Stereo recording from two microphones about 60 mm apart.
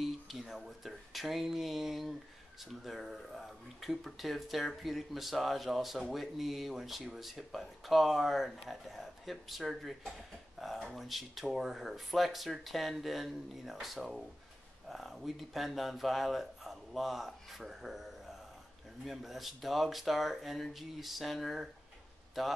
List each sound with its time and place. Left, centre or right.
0.0 s speech: centre